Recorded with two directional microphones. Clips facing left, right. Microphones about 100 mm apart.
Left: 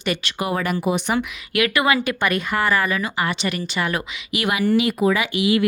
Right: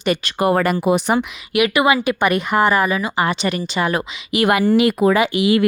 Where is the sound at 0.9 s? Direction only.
35° right (ahead or behind).